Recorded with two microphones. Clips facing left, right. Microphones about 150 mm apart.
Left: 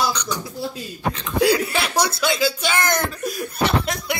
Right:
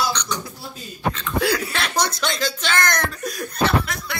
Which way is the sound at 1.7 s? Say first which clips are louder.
Left 2 dB; 10° left (ahead or behind).